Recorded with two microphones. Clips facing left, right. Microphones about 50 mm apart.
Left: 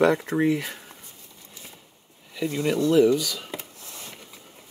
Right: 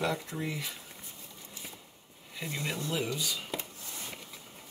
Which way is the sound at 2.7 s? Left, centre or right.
Left.